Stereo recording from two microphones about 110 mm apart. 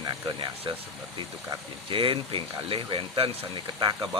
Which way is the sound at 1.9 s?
50° right (ahead or behind).